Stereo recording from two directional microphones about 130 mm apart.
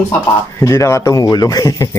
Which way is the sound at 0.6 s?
25° left (ahead or behind).